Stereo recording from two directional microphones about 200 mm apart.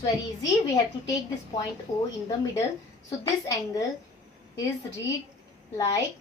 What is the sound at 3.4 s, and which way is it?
Speech, 15° left (ahead or behind).